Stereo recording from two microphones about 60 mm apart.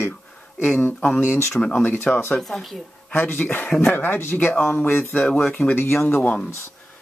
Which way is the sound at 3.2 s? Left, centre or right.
Left.